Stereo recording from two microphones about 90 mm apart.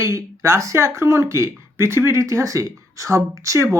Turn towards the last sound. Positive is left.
turn(degrees=-35)  # may be behind; listen again after turning